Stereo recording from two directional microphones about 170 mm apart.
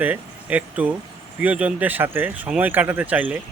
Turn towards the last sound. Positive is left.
turn(degrees=-10)  # may be behind; listen again after turning